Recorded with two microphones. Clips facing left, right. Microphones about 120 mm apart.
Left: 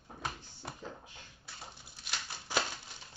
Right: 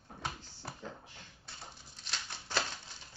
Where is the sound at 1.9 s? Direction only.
10° left (ahead or behind).